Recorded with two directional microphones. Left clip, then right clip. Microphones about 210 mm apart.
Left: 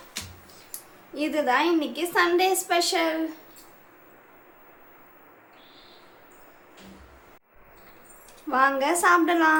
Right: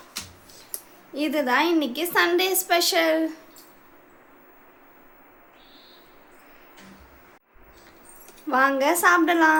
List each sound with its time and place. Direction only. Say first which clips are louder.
1.1 s a woman's voice: right 1 dB; 20° right (ahead or behind)
8.4 s a woman's voice: right 2 dB; 15° right (ahead or behind)